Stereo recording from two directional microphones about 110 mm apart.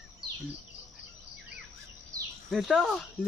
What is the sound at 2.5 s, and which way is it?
Speech, centre (ahead or behind).